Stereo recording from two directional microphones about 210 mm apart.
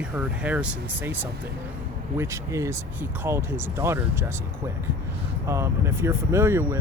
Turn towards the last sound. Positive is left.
turn(degrees=-10)  # may be behind; listen again after turning